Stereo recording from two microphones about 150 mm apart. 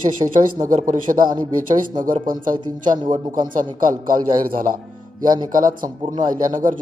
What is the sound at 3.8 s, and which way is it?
Speech, 65° right (ahead or behind).